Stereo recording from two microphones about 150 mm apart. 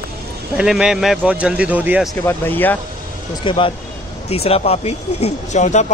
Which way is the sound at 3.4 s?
35° left (ahead or behind).